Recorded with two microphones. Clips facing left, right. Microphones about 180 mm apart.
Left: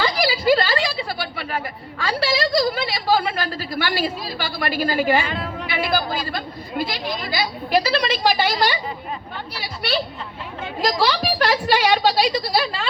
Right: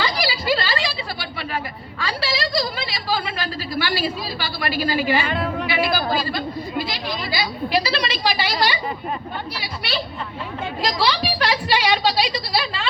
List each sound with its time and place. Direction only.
0.0 s a sound: 50° left (ahead or behind)
2.0 s a woman's voice: 55° left (ahead or behind)
5.2 s a woman's voice: 60° right (ahead or behind)
5.6 s a woman's voice: 50° left (ahead or behind)
9.6 s a woman's voice: 50° left (ahead or behind)